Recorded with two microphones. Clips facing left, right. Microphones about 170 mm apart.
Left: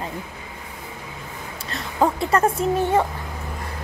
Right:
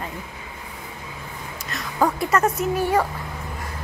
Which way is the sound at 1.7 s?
25° left (ahead or behind).